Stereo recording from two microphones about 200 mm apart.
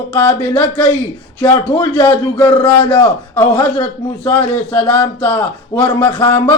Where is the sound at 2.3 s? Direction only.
10° left (ahead or behind).